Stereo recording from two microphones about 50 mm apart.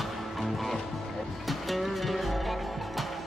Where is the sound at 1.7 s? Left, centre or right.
Centre.